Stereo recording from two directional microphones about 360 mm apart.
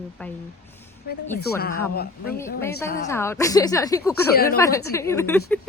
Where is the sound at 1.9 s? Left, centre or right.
Left.